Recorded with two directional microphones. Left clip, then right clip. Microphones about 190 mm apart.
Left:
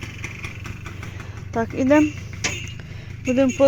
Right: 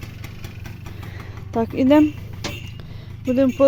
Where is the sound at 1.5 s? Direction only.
25° right (ahead or behind).